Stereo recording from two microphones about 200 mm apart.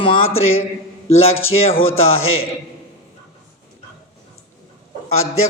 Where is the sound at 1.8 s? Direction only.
90° left.